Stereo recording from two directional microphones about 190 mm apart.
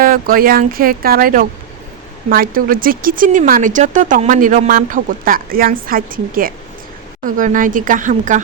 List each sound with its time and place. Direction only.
0.0 s speech: 50° right (ahead or behind)